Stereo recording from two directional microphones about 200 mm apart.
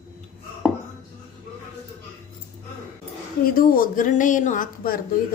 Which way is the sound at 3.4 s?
45° left (ahead or behind).